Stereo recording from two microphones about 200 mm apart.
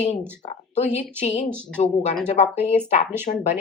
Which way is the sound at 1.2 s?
35° left (ahead or behind).